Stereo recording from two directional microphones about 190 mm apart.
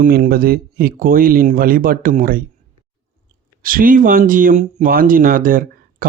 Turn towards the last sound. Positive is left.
turn(degrees=-50)  # may be behind; listen again after turning